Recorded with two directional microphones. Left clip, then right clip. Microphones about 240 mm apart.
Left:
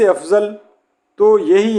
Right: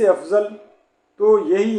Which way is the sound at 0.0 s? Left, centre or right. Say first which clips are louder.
Left 3 dB; left.